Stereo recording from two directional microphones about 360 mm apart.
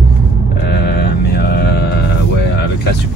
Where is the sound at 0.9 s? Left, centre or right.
Left.